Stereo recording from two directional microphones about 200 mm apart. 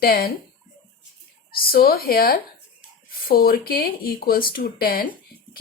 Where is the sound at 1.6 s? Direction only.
50° left (ahead or behind).